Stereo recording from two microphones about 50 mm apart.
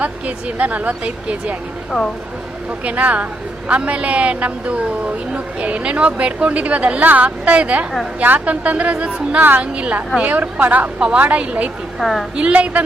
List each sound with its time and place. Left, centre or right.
0.0 s a woman's voice: right
2.8 s a woman's voice: right
9.4 s a woman's voice: right
9.7 s a woman's voice: right
11.9 s a woman's voice: centre
12.5 s a woman's voice: right